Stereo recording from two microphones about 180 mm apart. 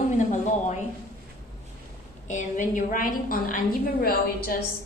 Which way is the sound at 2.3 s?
45° left (ahead or behind).